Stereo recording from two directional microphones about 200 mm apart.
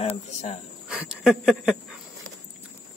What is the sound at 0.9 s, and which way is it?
Speech, centre (ahead or behind).